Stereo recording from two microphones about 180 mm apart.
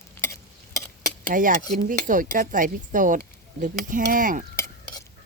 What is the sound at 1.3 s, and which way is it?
Speech, 50° right (ahead or behind).